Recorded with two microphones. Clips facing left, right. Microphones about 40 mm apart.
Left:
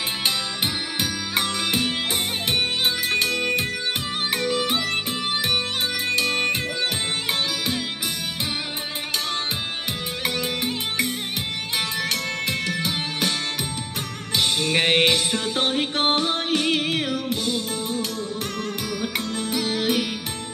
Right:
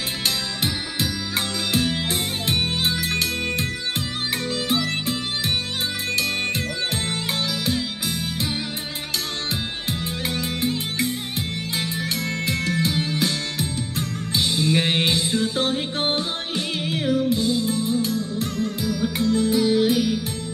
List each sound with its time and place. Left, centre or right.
0.9 s music: left
6.0 s music: left
10.2 s music: left
12.4 s music: left
14.3 s music: left